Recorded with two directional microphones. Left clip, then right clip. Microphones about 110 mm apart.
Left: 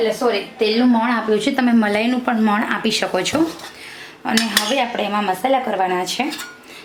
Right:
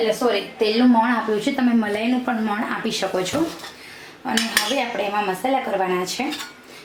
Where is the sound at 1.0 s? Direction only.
45° left (ahead or behind).